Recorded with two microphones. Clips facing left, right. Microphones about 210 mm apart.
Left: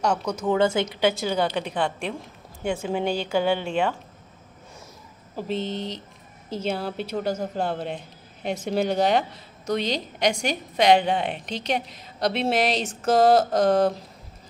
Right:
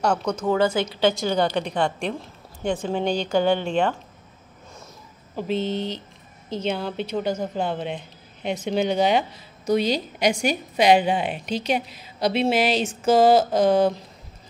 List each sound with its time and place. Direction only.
0.0 s a woman's voice: 5° right (ahead or behind)
0.5 s a woman's voice: 25° left (ahead or behind); by 3.9 s 5° left (ahead or behind)
5.3 s a woman's voice: centre (ahead or behind)